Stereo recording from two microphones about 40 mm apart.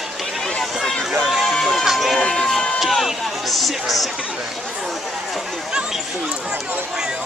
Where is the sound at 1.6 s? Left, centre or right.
Centre.